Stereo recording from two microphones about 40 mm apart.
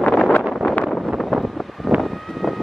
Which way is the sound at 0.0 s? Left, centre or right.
Left.